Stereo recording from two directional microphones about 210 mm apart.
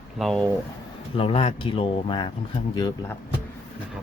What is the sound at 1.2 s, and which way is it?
Speech, 25° left (ahead or behind).